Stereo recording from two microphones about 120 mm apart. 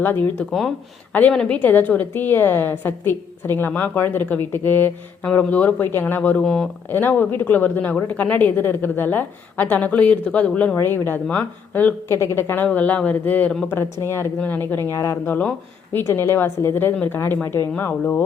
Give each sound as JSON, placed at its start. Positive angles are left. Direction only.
{"t": 0.0, "sound": "speech", "side_deg": 15}
{"t": 15.4, "sound": "speech", "side_deg": 15}